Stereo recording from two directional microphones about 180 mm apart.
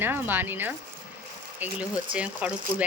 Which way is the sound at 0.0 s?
10° right (ahead or behind).